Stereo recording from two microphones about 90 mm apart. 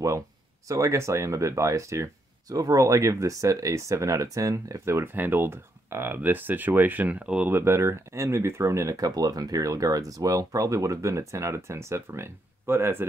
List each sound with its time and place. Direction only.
0.7 s speech: 35° right (ahead or behind); by 7.4 s 15° right (ahead or behind)
7.4 s speech: 25° right (ahead or behind)